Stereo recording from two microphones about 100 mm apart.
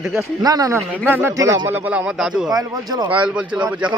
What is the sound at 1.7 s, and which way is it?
Speech, 20° right (ahead or behind).